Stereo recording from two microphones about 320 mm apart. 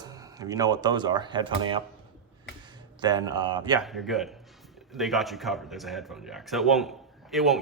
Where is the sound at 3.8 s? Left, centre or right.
Centre.